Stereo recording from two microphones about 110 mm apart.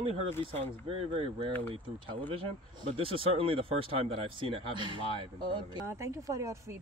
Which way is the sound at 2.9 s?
55° right (ahead or behind).